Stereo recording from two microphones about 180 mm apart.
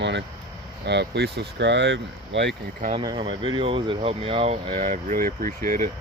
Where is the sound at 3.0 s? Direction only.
30° right (ahead or behind).